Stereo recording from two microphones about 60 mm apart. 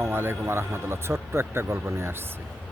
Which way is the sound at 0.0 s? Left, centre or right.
Right.